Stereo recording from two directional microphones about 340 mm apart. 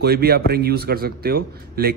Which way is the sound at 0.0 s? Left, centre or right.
Right.